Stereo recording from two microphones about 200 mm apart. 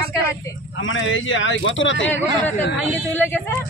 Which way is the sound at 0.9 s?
75° left (ahead or behind).